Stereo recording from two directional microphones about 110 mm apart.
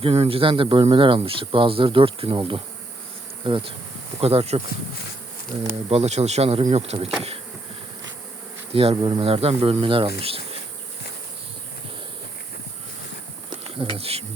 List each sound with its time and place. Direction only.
0.0 s speech: 60° right (ahead or behind)
4.2 s speech: 65° right (ahead or behind)
5.9 s speech: 85° right; by 7.1 s 70° right (ahead or behind)
8.7 s speech: 60° right (ahead or behind)
9.2 s speech: 65° right (ahead or behind)
13.7 s insect: 55° right (ahead or behind)